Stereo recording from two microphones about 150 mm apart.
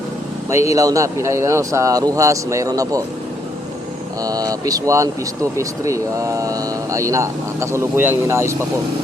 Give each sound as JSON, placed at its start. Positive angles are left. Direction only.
{"t": 0.5, "sound": "speech", "side_deg": -20}
{"t": 4.2, "sound": "speech", "side_deg": -25}